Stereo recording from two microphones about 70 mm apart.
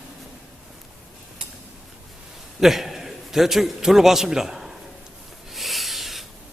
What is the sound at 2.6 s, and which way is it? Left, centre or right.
A man's voice, centre.